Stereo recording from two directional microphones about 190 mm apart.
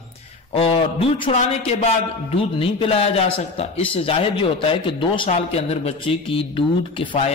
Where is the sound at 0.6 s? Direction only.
30° left (ahead or behind).